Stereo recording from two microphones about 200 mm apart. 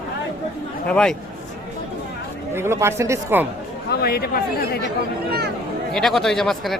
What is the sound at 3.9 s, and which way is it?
Speech, 50° left (ahead or behind).